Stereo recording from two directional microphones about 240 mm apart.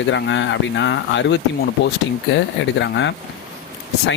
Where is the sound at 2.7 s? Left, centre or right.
Left.